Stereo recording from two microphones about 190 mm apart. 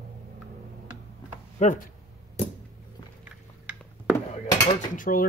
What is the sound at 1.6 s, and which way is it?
Speech, 35° left (ahead or behind).